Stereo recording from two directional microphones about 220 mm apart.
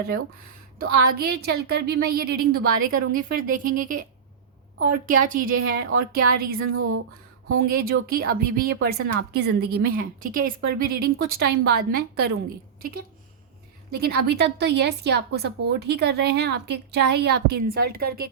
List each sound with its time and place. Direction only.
0.8 s a woman's voice: 45° right (ahead or behind)
5.5 s a woman's voice: 65° right (ahead or behind)
6.0 s a woman's voice: 45° right (ahead or behind)
6.7 s a sound: 75° right (ahead or behind)
7.7 s a woman's voice: 45° right (ahead or behind)
14.0 s a woman's voice: 45° right (ahead or behind)